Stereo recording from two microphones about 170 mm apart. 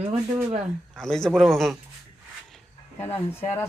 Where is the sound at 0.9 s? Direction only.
5° left (ahead or behind).